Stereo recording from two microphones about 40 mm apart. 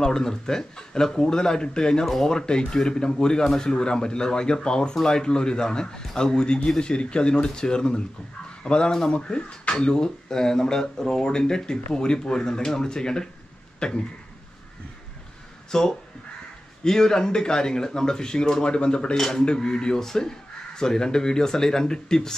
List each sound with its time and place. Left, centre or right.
0.0 s speech: centre
15.7 s speech: centre